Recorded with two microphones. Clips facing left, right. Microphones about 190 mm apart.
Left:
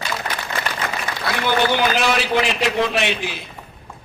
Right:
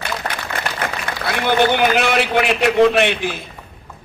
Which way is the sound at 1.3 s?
55° right (ahead or behind).